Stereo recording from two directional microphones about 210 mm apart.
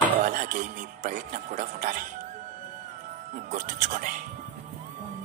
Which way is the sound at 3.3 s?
35° right (ahead or behind).